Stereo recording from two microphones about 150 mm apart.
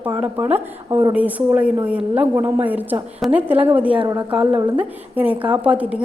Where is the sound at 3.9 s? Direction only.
30° right (ahead or behind).